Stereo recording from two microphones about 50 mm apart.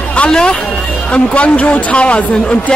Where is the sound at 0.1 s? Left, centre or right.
Left.